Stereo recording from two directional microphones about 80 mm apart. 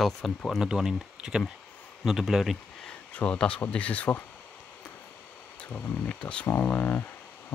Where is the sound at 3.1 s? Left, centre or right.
Centre.